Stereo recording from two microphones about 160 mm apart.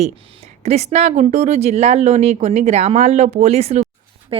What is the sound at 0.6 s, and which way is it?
A woman's voice, 40° right (ahead or behind).